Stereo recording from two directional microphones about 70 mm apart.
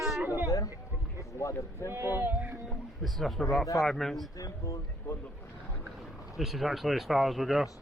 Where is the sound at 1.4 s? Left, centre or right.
Left.